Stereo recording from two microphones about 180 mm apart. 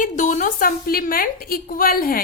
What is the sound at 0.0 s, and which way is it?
A woman's voice, 40° left (ahead or behind).